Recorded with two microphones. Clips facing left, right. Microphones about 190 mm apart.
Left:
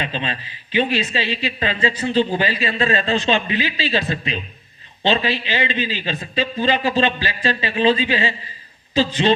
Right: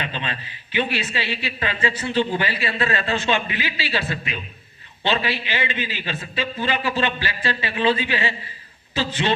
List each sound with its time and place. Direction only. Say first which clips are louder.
0.0 s a man's voice: left 4 dB; 15° left (ahead or behind)